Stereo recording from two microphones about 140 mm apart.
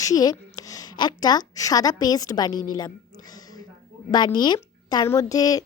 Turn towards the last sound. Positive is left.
turn(degrees=25)  # may be behind; listen again after turning